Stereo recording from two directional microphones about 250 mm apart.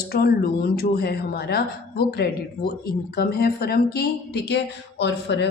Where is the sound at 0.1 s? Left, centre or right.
Left.